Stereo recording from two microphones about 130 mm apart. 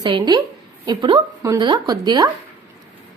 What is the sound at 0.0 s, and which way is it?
A woman's voice, 35° right (ahead or behind).